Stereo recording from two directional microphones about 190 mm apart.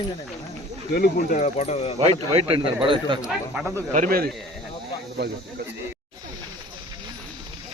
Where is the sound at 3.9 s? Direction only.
50° right (ahead or behind).